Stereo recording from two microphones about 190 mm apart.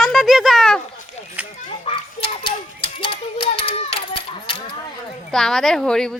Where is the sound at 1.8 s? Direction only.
30° left (ahead or behind).